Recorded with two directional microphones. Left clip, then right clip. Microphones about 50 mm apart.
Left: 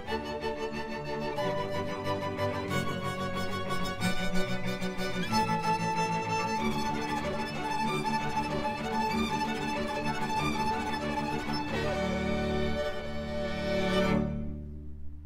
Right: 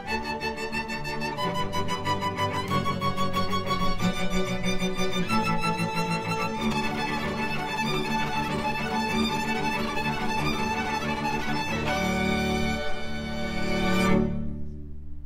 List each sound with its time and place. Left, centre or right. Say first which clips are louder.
2.7 s music: right 6 dB; left
3.8 s music: right 4 dB; centre
5.8 s music: right 1 dB; left
8.9 s music: right 1 dB; left
13.7 s music: right 3 dB; centre